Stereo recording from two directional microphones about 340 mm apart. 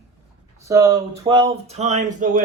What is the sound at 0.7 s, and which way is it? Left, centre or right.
Speech, centre.